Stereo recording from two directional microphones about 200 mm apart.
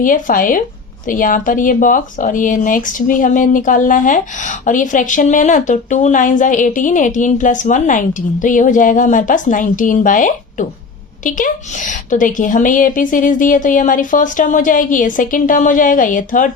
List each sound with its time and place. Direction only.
0.0 s speech: 40° left (ahead or behind)